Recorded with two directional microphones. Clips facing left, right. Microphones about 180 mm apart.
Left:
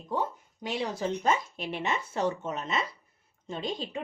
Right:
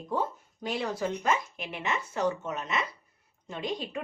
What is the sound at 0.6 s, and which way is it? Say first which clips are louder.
Speech: even; 25° left (ahead or behind).